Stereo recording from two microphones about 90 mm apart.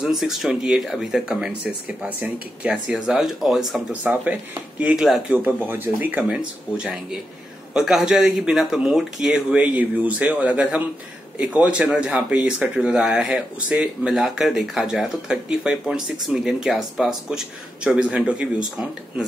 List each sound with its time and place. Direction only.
0.0 s speech: 5° right (ahead or behind)
2.7 s speech: 5° right (ahead or behind)
3.9 s speech: 15° right (ahead or behind)
5.4 s speech: 20° right (ahead or behind)